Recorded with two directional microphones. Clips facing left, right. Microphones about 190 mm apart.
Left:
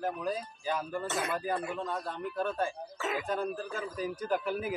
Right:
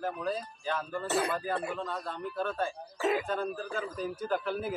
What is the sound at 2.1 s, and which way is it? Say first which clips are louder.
A man's voice: left 1 dB; centre (ahead or behind).